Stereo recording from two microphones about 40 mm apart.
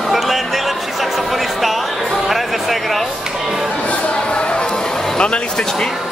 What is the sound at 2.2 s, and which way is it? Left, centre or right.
Music, centre.